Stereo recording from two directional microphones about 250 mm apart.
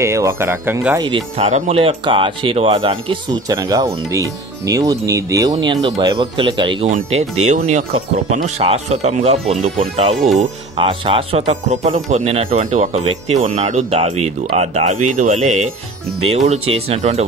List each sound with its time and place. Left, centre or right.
0.0 s speech: centre